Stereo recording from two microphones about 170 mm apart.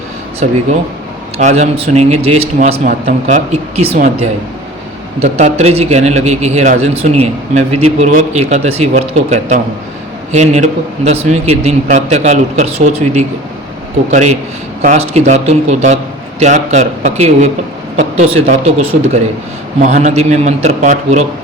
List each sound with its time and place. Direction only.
0.4 s a man's voice: 45° right (ahead or behind)
2.7 s a man's voice: 50° right (ahead or behind)
5.2 s a man's voice: 40° right (ahead or behind)